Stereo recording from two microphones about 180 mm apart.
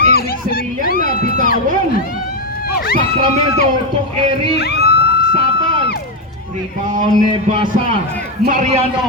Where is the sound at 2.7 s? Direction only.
60° left (ahead or behind).